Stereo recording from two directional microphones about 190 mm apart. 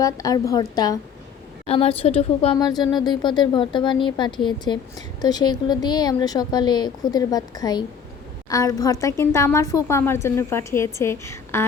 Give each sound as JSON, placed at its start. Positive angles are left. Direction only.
{"t": 0.0, "sound": "speech", "side_deg": 20}
{"t": 1.6, "sound": "a woman's voice", "side_deg": 30}